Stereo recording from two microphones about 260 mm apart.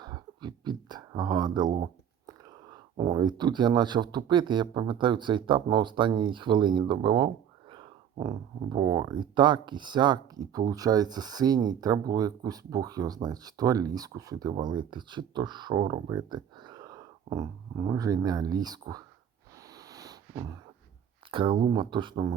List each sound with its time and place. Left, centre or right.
0.0 s speech: centre
19.7 s a sound: centre
21.2 s speech: centre